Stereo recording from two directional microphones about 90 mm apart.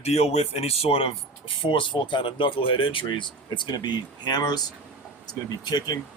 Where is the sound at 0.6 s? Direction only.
90° left; by 4.6 s 50° left (ahead or behind).